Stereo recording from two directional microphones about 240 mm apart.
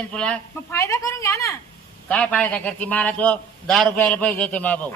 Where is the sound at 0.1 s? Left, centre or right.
Centre.